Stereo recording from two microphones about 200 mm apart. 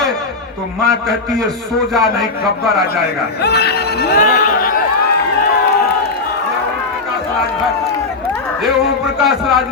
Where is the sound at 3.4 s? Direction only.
55° left (ahead or behind).